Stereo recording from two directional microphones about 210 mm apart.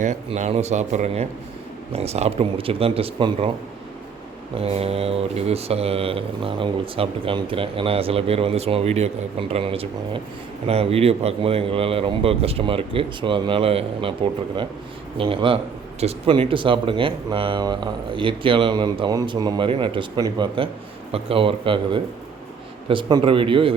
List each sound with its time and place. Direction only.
0.0 s speech: 35° right (ahead or behind)
4.6 s speech: 30° right (ahead or behind)
15.2 s speech: 25° right (ahead or behind)